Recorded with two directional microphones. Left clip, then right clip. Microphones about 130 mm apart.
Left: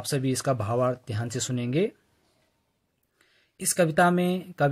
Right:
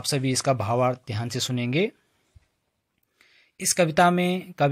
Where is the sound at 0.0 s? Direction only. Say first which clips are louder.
Right 3 dB; 25° right (ahead or behind).